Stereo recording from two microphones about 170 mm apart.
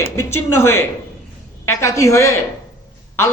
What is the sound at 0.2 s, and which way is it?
Speech, 15° left (ahead or behind).